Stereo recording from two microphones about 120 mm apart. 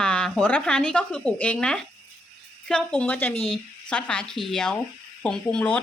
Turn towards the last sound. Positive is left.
turn(degrees=10)  # may be behind; listen again after turning